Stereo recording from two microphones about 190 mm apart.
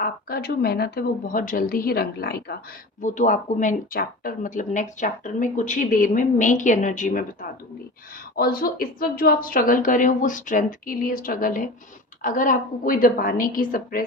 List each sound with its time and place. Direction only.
0.0 s speech: 55° left (ahead or behind)
3.0 s a woman's voice: 40° left (ahead or behind)
8.4 s speech: 50° left (ahead or behind)